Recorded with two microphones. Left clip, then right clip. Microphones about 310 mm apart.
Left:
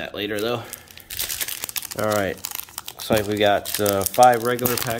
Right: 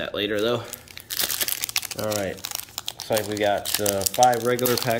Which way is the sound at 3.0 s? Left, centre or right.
Centre.